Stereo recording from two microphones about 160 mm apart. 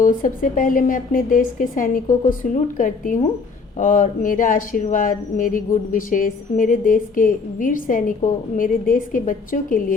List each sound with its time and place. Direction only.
0.0 s speech: 55° left (ahead or behind)